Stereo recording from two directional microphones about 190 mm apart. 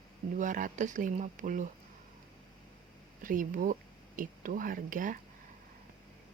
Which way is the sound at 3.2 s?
45° right (ahead or behind).